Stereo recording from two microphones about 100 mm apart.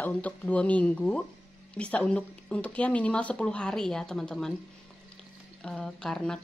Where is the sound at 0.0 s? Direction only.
15° left (ahead or behind).